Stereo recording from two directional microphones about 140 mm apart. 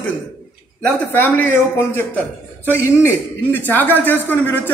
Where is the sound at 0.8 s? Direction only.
10° left (ahead or behind).